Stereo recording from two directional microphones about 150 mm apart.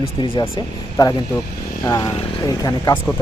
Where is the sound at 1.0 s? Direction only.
25° left (ahead or behind).